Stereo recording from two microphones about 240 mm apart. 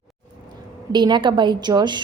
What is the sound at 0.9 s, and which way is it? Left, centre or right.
A woman's voice, centre.